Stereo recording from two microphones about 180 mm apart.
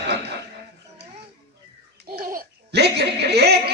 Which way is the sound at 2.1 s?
55° right (ahead or behind).